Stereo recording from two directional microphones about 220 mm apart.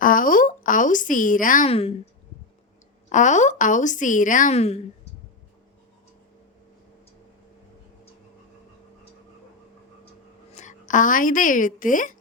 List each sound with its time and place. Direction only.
0.0 s a sound: 40° left (ahead or behind)
3.1 s speech: 35° left (ahead or behind)
10.5 s a woman's voice: 35° left (ahead or behind)